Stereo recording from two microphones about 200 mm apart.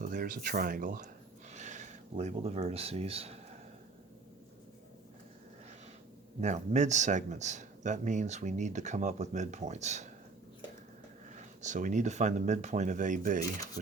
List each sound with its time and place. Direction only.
0.0 s speech: 40° right (ahead or behind)
6.4 s speech: 35° right (ahead or behind)
11.3 s speech: 35° right (ahead or behind)